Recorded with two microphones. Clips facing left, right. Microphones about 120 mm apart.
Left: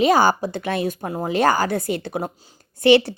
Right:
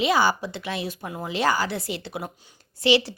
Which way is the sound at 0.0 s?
45° left (ahead or behind).